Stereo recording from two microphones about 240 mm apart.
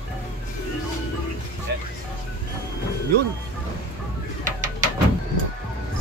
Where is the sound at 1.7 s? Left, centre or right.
Right.